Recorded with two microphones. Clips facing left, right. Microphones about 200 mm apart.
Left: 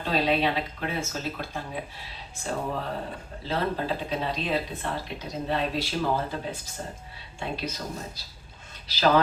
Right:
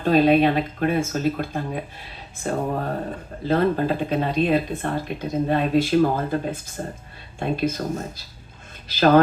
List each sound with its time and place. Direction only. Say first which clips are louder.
0.0 s speech: right 9 dB; 50° right (ahead or behind)